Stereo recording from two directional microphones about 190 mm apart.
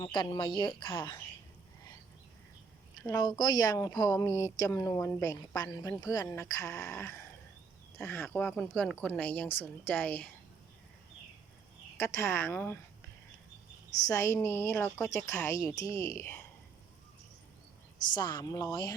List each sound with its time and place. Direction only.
0.0 s a woman's voice: 25° left (ahead or behind)
3.0 s speech: 20° left (ahead or behind)
11.9 s speech: 10° left (ahead or behind)
14.1 s speech: 15° left (ahead or behind)
18.1 s a woman's voice: 25° left (ahead or behind)